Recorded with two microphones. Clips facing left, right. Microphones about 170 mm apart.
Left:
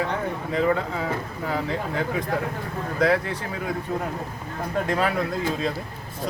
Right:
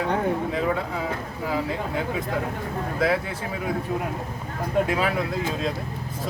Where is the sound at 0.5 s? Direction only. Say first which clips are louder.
Left 2 dB; 5° right (ahead or behind).